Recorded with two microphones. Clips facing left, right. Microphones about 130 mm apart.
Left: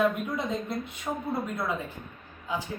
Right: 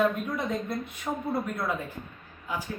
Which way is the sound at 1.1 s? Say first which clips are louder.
Right 1 dB; 5° right (ahead or behind).